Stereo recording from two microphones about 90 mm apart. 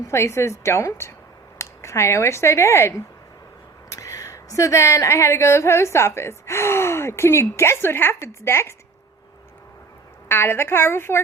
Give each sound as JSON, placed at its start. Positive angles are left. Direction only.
{"t": 0.0, "sound": "a woman's voice", "side_deg": 30}
{"t": 3.9, "sound": "speech", "side_deg": 35}
{"t": 10.2, "sound": "a woman's voice", "side_deg": 25}